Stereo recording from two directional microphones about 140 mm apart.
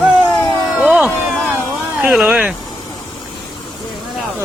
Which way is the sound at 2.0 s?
10° right (ahead or behind).